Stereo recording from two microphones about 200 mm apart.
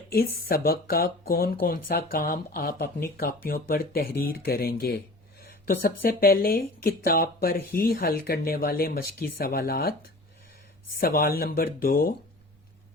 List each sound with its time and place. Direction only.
0.1 s speech: 50° left (ahead or behind)
10.9 s speech: 45° left (ahead or behind)